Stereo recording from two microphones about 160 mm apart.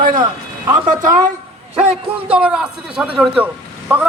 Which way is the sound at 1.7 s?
40° right (ahead or behind).